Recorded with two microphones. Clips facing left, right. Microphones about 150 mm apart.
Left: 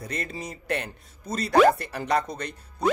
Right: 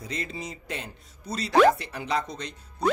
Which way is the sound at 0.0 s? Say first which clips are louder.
Left 1 dB; 55° left (ahead or behind).